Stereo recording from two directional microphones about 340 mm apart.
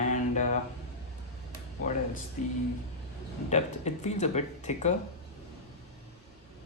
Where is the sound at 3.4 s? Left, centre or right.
Centre.